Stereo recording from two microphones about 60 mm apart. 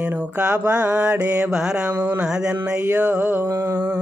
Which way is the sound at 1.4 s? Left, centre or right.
Centre.